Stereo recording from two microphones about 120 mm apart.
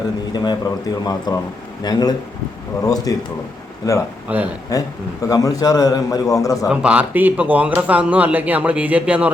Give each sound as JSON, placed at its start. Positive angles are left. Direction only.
{"t": 0.3, "sound": "speech", "side_deg": 35}
{"t": 4.3, "sound": "speech", "side_deg": -15}
{"t": 4.7, "sound": "a man's voice", "side_deg": 30}
{"t": 6.7, "sound": "speech", "side_deg": -10}